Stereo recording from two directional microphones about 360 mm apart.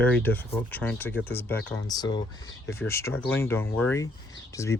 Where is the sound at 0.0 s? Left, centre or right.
Centre.